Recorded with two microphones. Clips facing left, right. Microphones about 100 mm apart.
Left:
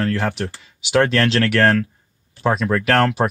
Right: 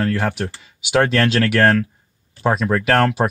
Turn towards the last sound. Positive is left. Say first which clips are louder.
# even
turn(degrees=-5)  # may be behind; listen again after turning